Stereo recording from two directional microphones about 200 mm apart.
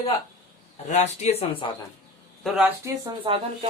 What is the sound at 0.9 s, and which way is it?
Speech, 35° left (ahead or behind).